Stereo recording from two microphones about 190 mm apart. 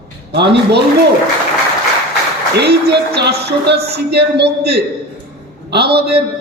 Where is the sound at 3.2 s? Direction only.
60° right (ahead or behind).